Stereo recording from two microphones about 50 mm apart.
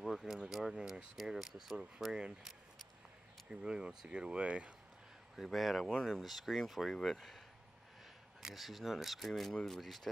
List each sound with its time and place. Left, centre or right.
0.0 s a sound: centre
0.5 s speech: centre
3.4 s speech: centre
5.3 s speech: centre